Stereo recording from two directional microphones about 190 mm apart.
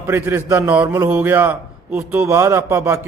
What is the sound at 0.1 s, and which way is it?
A man's voice, 15° right (ahead or behind).